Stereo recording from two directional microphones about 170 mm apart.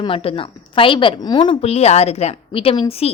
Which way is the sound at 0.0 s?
30° left (ahead or behind).